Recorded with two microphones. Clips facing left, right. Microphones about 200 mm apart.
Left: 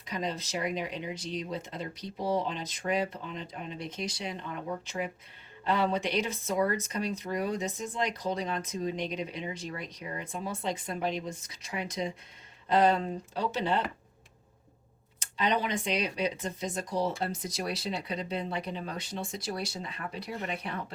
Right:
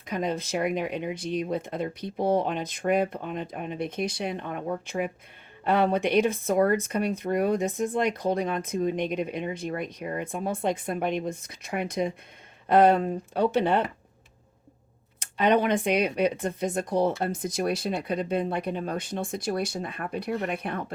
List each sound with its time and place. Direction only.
0.0 s speech: 55° right (ahead or behind)
15.2 s speech: 55° right (ahead or behind)